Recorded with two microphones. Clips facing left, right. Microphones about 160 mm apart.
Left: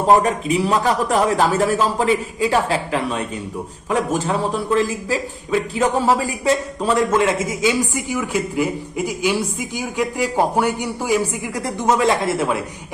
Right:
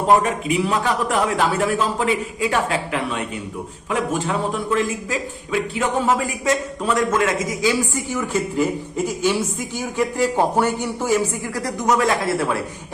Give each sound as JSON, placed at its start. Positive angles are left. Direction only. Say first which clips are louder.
{"t": 0.2, "sound": "a man's voice", "louder": "left 2 dB", "side_deg": 35}
{"t": 11.6, "sound": "a man's voice", "louder": "left 2 dB", "side_deg": 25}